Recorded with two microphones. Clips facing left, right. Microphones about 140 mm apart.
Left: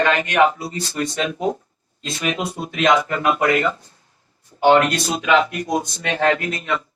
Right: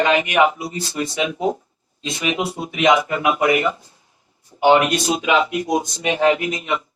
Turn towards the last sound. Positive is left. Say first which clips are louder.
# right 1 dB
turn(degrees=-15)  # may be behind; listen again after turning